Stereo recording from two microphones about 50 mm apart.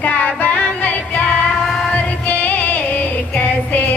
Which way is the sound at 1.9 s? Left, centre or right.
Left.